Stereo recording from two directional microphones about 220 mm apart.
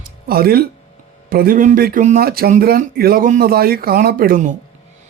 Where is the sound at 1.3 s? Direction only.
40° right (ahead or behind).